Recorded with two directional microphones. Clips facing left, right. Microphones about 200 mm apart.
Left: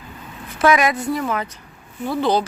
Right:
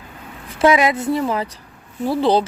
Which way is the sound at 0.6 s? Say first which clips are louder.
Right 2 dB; 25° right (ahead or behind).